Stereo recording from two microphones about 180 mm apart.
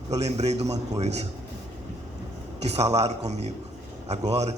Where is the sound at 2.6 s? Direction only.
35° right (ahead or behind).